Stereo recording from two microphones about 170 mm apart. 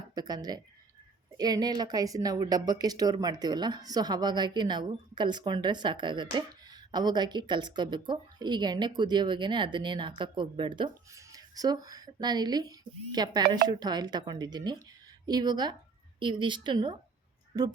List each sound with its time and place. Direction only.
0.1 s speech: 25° right (ahead or behind)